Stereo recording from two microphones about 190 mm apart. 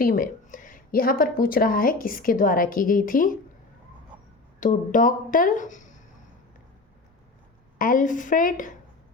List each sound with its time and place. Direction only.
0.0 s a woman's voice: 50° left (ahead or behind)
4.6 s a woman's voice: 45° left (ahead or behind)
7.8 s a woman's voice: 45° left (ahead or behind)